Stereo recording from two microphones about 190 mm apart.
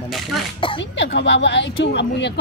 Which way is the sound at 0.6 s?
25° left (ahead or behind).